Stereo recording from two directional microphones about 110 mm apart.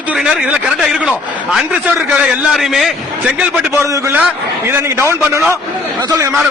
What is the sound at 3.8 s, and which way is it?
A man's voice, 25° right (ahead or behind).